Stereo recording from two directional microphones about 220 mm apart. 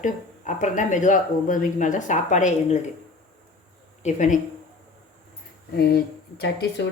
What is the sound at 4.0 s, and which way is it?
Speech, 35° left (ahead or behind).